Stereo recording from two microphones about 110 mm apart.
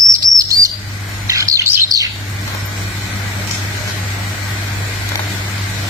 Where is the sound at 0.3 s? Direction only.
30° right (ahead or behind).